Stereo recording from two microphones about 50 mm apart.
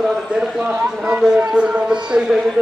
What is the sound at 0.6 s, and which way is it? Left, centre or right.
Speech, right.